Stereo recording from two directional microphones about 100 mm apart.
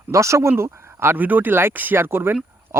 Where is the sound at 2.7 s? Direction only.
25° right (ahead or behind).